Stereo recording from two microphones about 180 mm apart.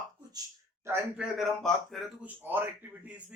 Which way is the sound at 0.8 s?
10° right (ahead or behind).